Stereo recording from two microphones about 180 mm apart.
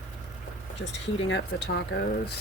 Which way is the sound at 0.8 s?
90° left.